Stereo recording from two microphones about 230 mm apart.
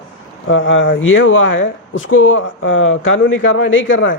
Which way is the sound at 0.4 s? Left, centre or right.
Left.